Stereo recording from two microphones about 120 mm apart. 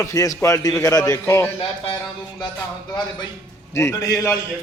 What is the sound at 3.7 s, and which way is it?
Speech, 25° left (ahead or behind).